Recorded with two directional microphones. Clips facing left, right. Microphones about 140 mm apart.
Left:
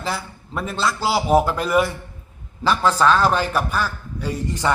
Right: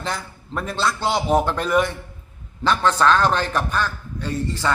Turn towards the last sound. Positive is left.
turn(degrees=15)  # may be behind; listen again after turning